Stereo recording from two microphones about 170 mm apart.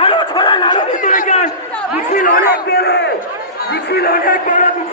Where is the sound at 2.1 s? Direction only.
55° left (ahead or behind); by 3.1 s 80° left.